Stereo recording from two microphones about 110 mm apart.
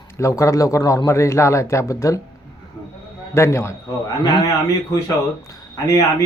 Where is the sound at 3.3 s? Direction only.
25° left (ahead or behind).